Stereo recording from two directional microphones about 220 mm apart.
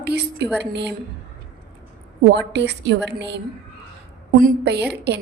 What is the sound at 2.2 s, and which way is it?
A woman's voice, 50° right (ahead or behind).